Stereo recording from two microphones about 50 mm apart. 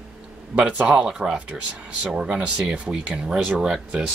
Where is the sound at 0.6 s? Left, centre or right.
Right.